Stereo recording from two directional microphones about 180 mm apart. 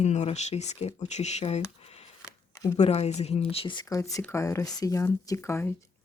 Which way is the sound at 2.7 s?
35° left (ahead or behind).